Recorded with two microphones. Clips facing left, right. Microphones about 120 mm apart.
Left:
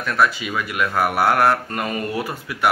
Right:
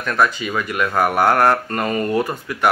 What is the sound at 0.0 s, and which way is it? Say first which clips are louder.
Speech: right 1 dB; 5° left (ahead or behind).